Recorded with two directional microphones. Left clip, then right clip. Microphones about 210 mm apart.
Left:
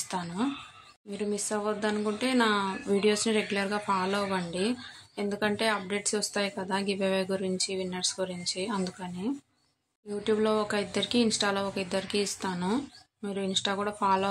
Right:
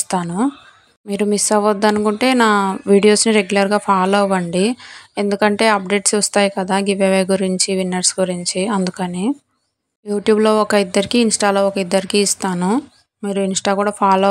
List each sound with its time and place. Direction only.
0.1 s speech: 40° right (ahead or behind)